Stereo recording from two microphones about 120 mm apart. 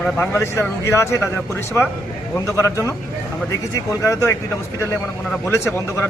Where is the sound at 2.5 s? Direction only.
25° left (ahead or behind).